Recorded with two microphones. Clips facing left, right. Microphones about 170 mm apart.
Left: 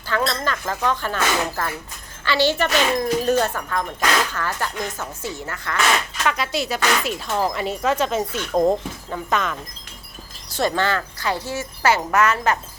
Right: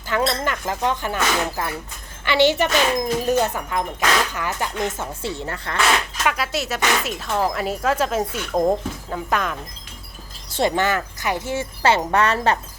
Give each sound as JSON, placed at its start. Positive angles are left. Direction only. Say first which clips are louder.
{"t": 0.1, "sound": "speech", "louder": "right 1 dB", "side_deg": -20}
{"t": 6.2, "sound": "speech", "louder": "left 1 dB", "side_deg": -5}
{"t": 10.6, "sound": "speech", "louder": "right 1 dB", "side_deg": -20}